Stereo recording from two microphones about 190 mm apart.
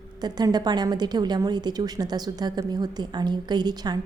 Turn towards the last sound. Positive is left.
turn(degrees=-20)  # may be behind; listen again after turning